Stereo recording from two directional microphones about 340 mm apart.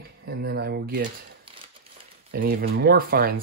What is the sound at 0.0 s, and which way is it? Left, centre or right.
Speech, right.